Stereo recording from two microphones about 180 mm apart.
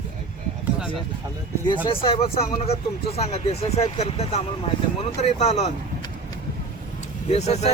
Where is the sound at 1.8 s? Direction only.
30° left (ahead or behind).